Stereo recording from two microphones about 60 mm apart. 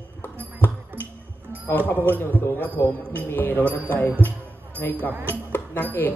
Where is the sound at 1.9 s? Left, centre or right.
Left.